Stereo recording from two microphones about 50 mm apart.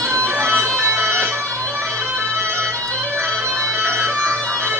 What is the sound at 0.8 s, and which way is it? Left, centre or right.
Music, right.